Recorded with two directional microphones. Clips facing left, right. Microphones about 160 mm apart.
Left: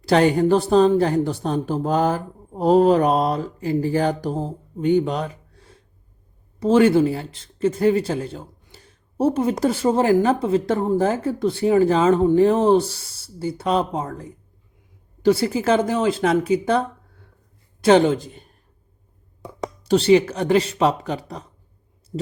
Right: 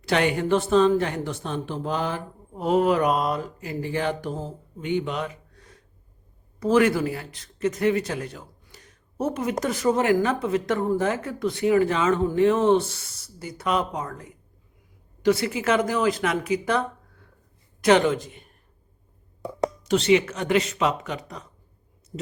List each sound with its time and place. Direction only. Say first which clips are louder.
0.0 s speech: left 6 dB; 35° left (ahead or behind)
17.8 s speech: left 4 dB; 30° left (ahead or behind)
19.8 s speech: left 5 dB; 35° left (ahead or behind)